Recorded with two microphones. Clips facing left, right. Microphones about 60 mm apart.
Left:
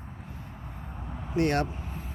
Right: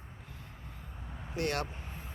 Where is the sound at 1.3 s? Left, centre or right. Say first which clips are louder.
Left 8 dB; left.